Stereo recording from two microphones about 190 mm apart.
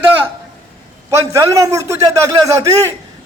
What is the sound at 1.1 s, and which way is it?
A man's voice, 15° right (ahead or behind).